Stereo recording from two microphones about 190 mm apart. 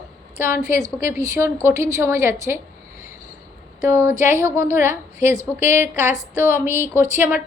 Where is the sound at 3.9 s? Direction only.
15° right (ahead or behind).